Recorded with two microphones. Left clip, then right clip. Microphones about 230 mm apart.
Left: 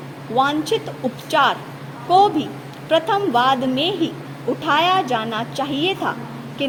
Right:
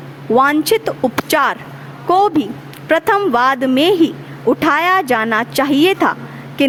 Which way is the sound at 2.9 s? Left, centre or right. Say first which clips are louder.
Right 4 dB; right.